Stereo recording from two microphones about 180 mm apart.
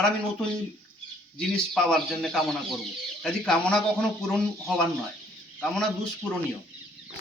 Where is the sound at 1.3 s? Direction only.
5° left (ahead or behind).